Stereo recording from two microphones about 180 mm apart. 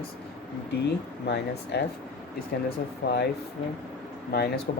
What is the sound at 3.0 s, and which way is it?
Speech, 80° left.